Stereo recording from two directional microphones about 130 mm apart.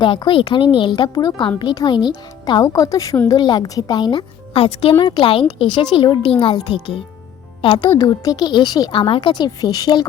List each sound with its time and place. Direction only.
0.0 s speech: 40° left (ahead or behind)
4.5 s a woman's voice: 45° left (ahead or behind)
8.0 s speech: 30° left (ahead or behind)